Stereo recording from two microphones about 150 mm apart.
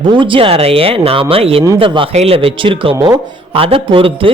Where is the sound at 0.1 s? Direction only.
35° right (ahead or behind).